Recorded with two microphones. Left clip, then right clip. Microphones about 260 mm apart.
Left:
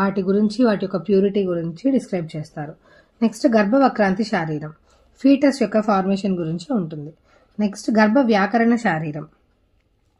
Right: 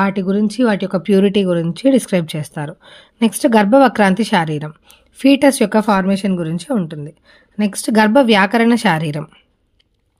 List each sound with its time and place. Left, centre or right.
0.0 s speech: right
2.3 s speech: right
2.9 s speech: right
3.3 s speech: right
3.7 s speech: right
4.0 s speech: right
5.1 s speech: right
5.5 s speech: right
5.9 s speech: right
8.6 s speech: right